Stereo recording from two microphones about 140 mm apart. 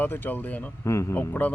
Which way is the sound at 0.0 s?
15° left (ahead or behind).